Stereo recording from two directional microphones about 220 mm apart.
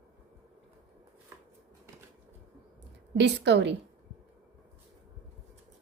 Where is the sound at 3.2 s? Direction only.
50° right (ahead or behind).